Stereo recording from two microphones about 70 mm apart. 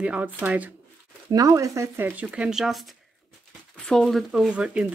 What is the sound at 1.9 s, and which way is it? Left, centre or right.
Speech, right.